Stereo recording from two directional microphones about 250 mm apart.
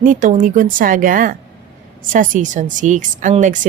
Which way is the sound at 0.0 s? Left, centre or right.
Right.